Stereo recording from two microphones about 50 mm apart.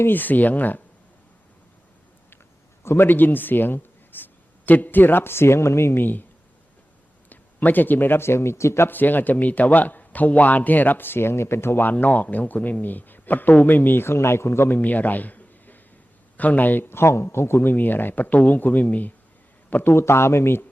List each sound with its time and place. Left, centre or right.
0.0 s a man's voice: left
2.8 s speech: left
6.0 s a man's voice: left
7.3 s a man's voice: left
8.9 s a man's voice: left
11.8 s a man's voice: left
14.8 s a sound: left
16.4 s a man's voice: left
16.9 s a man's voice: left
17.7 s a man's voice: left
19.7 s a man's voice: left